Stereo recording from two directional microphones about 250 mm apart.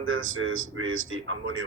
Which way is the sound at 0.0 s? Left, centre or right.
Right.